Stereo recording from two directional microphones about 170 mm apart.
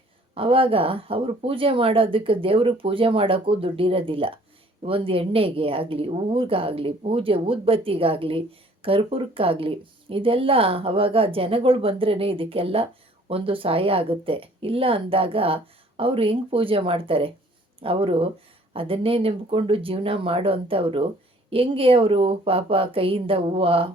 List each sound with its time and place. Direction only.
0.3 s a woman's voice: 30° right (ahead or behind)